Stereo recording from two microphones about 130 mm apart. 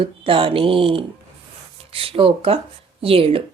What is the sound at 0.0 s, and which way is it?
Speech, 45° right (ahead or behind).